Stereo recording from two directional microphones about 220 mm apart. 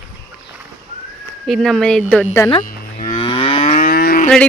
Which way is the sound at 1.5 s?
Centre (ahead or behind).